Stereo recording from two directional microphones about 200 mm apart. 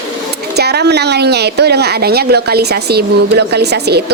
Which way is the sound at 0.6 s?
55° right (ahead or behind).